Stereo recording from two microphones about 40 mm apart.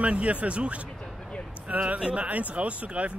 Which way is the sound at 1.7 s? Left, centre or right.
Right.